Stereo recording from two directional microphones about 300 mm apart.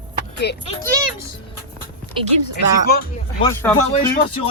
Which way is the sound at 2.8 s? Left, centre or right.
Left.